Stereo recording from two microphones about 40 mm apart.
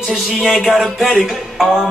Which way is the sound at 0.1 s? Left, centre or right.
Centre.